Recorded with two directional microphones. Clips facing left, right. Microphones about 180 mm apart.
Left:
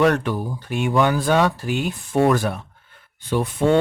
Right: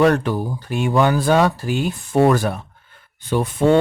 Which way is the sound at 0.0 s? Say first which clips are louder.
Right 2 dB; 35° right (ahead or behind).